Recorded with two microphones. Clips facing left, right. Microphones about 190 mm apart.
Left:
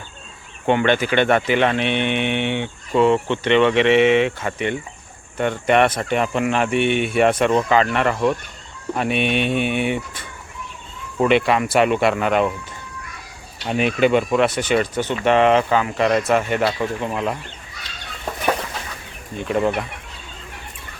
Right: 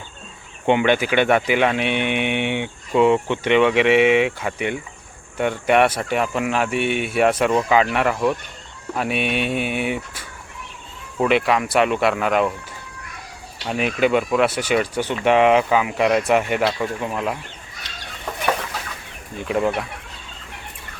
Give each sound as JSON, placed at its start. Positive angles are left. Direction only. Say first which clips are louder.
{"t": 0.7, "sound": "speech", "louder": "even", "side_deg": -10}
{"t": 13.7, "sound": "speech", "louder": "left 2 dB", "side_deg": 0}
{"t": 16.6, "sound": "speech", "louder": "left 1 dB", "side_deg": 0}
{"t": 19.5, "sound": "speech", "louder": "left 1 dB", "side_deg": 0}